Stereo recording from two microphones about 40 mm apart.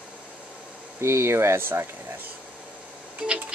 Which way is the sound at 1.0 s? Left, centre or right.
Right.